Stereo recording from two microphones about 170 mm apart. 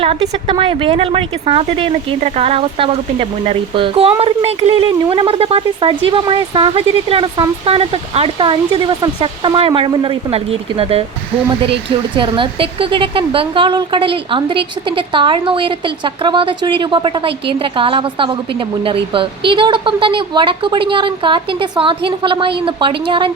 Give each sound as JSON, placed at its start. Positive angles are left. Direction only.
{"t": 0.0, "sound": "speech", "side_deg": -35}
{"t": 12.1, "sound": "a woman's voice", "side_deg": -30}